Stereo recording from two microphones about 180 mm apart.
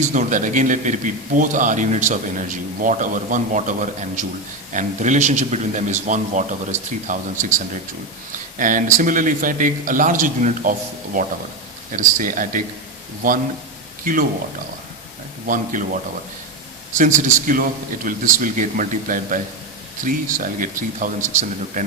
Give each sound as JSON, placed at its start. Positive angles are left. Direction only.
{"t": 0.0, "sound": "a man's voice", "side_deg": -45}
{"t": 15.4, "sound": "a man's voice", "side_deg": -50}
{"t": 17.0, "sound": "a man's voice", "side_deg": -45}